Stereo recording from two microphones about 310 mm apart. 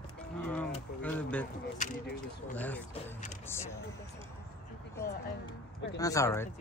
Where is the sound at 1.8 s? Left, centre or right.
Left.